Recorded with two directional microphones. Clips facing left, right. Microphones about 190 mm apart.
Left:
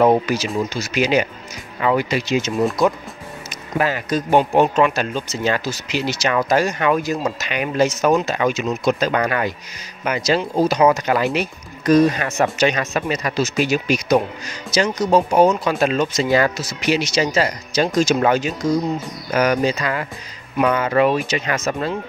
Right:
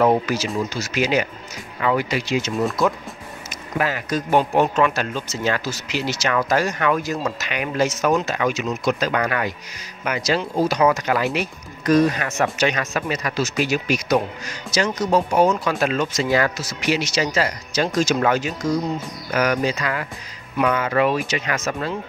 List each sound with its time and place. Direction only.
0.0 s speech: 20° left (ahead or behind)
3.7 s speech: 30° left (ahead or behind)